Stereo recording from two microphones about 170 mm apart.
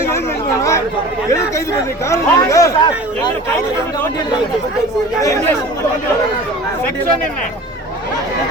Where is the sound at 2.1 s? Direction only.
20° left (ahead or behind).